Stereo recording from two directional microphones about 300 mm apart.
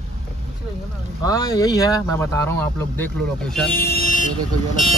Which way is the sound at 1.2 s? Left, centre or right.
Centre.